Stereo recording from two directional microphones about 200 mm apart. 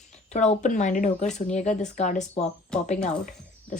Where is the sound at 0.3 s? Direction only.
35° left (ahead or behind).